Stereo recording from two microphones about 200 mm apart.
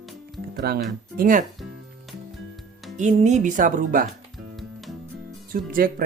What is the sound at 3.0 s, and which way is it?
Speech, 35° right (ahead or behind).